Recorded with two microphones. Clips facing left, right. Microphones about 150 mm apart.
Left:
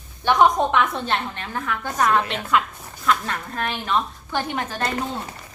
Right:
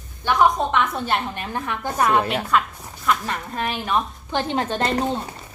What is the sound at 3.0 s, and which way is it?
Speech, 5° right (ahead or behind).